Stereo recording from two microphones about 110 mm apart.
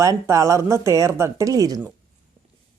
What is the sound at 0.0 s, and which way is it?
Speech, 30° right (ahead or behind).